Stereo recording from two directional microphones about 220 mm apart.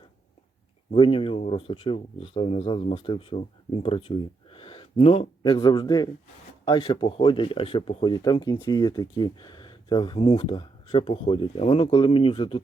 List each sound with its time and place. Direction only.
0.9 s speech: 25° left (ahead or behind)